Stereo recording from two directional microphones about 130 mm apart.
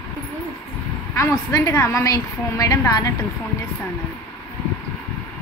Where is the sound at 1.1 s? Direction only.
25° left (ahead or behind).